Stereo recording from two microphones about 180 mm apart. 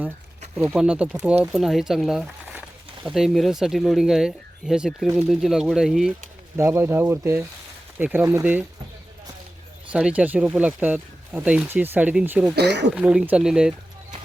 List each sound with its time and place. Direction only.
0.6 s speech: 5° right (ahead or behind)
6.6 s speech: 15° right (ahead or behind)
9.9 s speech: 5° right (ahead or behind)
12.5 s speech: 70° right (ahead or behind)
12.9 s speech: 5° right (ahead or behind)